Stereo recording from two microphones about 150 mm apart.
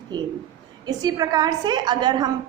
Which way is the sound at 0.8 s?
25° right (ahead or behind).